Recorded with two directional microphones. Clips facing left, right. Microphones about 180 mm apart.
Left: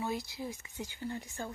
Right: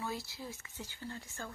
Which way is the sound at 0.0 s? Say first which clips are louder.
Left 5 dB; 15° left (ahead or behind).